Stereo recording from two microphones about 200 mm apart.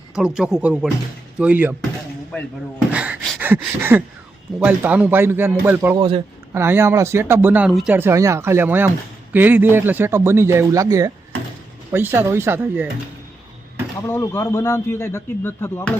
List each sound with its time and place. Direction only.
0.1 s speech: 5° right (ahead or behind)
2.3 s speech: 5° left (ahead or behind)
2.7 s a sound: 5° right (ahead or behind)
4.6 s speech: 5° right (ahead or behind)
6.0 s a man's voice: 25° right (ahead or behind)
6.5 s speech: 10° right (ahead or behind)
14.1 s speech: 15° left (ahead or behind)